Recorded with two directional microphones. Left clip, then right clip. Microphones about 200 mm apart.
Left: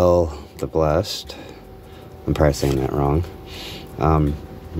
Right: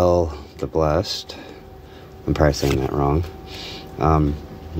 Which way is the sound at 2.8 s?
10° left (ahead or behind).